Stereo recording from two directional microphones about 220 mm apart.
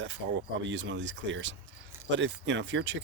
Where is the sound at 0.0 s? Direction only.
55° right (ahead or behind).